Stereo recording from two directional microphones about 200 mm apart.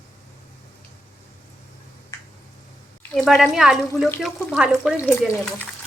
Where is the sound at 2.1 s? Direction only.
15° left (ahead or behind).